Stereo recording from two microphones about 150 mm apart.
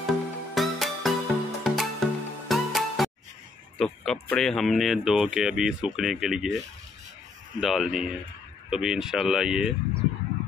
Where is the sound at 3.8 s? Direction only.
5° left (ahead or behind).